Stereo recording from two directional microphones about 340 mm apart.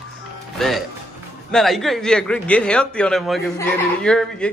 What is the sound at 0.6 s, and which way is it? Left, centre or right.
Music, centre.